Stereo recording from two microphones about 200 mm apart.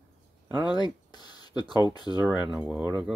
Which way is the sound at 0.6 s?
20° left (ahead or behind).